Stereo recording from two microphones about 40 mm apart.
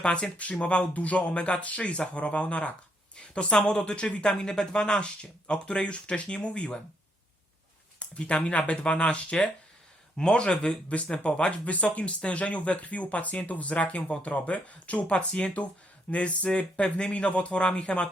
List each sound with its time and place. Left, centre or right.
0.0 s speech: left
3.2 s speech: left
7.9 s a sound: left
8.4 s speech: left
15.1 s speech: left